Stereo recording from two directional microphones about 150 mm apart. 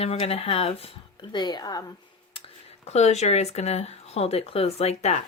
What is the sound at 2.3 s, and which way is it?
Speech, 40° left (ahead or behind).